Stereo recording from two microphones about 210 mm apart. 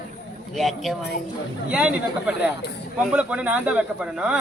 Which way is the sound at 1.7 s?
5° right (ahead or behind).